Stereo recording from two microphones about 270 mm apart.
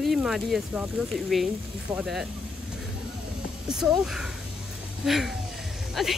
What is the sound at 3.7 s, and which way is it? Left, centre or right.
Speech, centre.